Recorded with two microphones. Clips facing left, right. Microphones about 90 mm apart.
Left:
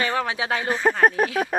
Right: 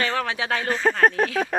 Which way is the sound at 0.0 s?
15° left (ahead or behind).